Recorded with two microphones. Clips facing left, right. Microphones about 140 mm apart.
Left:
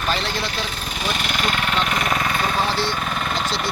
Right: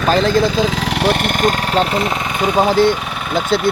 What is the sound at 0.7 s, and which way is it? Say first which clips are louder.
Speech: right 11 dB; 90° right.